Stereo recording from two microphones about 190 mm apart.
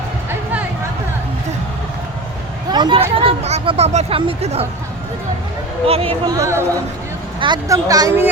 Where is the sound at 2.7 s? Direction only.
25° right (ahead or behind).